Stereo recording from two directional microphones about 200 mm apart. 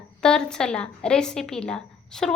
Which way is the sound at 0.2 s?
5° left (ahead or behind).